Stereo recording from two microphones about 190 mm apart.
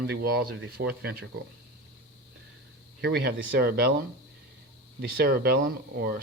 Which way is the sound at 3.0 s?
60° right (ahead or behind).